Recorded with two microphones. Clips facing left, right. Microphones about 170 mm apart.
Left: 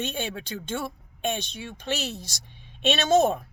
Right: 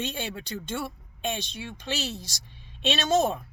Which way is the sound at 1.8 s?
55° left (ahead or behind).